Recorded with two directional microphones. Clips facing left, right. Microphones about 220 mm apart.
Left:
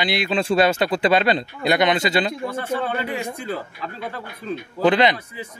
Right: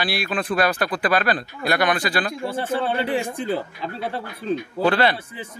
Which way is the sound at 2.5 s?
30° right (ahead or behind).